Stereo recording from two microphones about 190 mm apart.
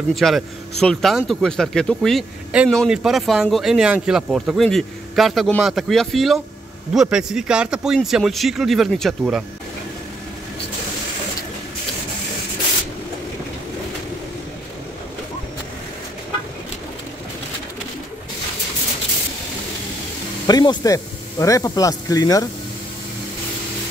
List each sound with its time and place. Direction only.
0.1 s speech: centre (ahead or behind)
20.4 s speech: 20° left (ahead or behind)